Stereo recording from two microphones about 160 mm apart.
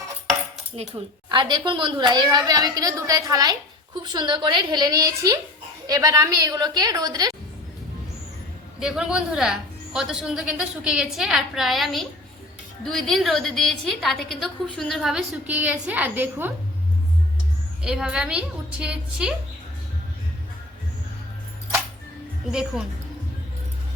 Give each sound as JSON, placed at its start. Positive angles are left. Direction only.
{"t": 0.8, "sound": "a woman's voice", "side_deg": -35}
{"t": 8.8, "sound": "a woman's voice", "side_deg": -5}
{"t": 17.8, "sound": "a woman's voice", "side_deg": -5}
{"t": 22.4, "sound": "a woman's voice", "side_deg": -5}